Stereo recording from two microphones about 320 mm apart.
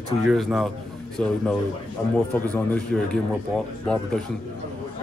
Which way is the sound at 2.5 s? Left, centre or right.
Centre.